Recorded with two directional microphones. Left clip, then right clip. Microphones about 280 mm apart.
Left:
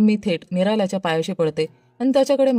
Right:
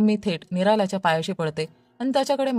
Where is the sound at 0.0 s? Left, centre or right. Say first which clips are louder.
Left 3 dB; right.